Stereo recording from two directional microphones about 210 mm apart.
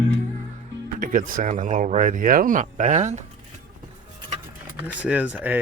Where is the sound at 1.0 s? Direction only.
40° right (ahead or behind).